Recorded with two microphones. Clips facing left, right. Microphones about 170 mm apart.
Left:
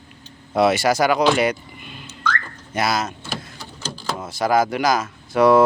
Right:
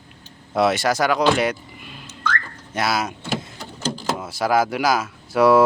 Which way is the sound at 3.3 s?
20° right (ahead or behind).